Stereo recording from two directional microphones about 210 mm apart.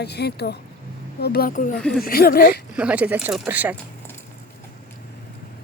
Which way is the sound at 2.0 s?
45° left (ahead or behind).